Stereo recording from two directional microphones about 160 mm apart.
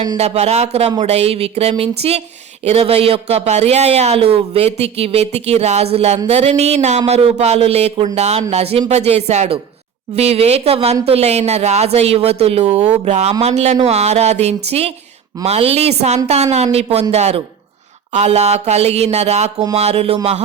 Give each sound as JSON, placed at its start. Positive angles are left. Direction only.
{"t": 0.2, "sound": "speech", "side_deg": -40}